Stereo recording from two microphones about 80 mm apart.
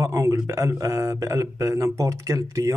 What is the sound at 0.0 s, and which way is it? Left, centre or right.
A man's voice, right.